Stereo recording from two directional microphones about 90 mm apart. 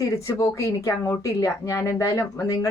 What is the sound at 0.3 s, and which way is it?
Speech, 40° left (ahead or behind).